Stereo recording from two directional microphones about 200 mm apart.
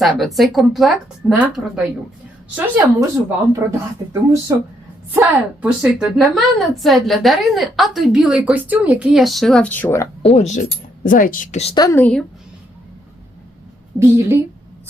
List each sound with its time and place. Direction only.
0.0 s a woman's voice: centre (ahead or behind)
10.2 s speech: 35° left (ahead or behind)
11.7 s a woman's voice: 15° left (ahead or behind)
14.0 s speech: 15° right (ahead or behind)